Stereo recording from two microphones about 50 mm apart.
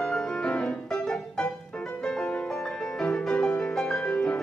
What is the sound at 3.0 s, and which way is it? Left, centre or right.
Music, centre.